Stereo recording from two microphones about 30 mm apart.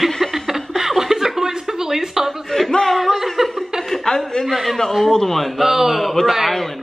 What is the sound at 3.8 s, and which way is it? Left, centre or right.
Chuckle, centre.